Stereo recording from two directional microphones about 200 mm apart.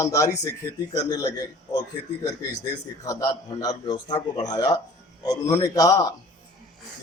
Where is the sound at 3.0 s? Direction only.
15° left (ahead or behind).